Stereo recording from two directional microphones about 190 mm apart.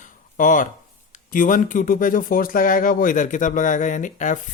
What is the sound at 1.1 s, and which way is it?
Speech, 45° left (ahead or behind).